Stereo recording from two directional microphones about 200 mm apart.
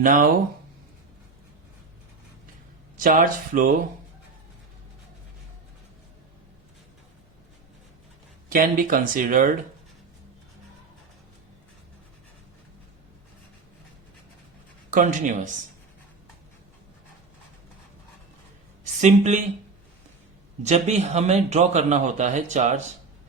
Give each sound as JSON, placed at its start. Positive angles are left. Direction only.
{"t": 0.0, "sound": "speech", "side_deg": -40}
{"t": 3.0, "sound": "speech", "side_deg": -40}
{"t": 8.4, "sound": "speech", "side_deg": -45}
{"t": 14.8, "sound": "speech", "side_deg": -40}
{"t": 18.9, "sound": "speech", "side_deg": -35}
{"t": 20.6, "sound": "speech", "side_deg": -35}